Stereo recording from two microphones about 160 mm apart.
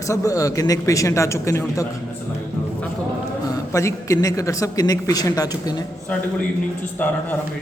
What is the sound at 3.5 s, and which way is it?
Speech, 20° left (ahead or behind).